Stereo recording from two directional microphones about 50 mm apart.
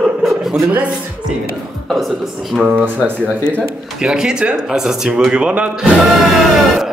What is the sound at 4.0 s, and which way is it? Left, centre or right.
A man's voice, centre.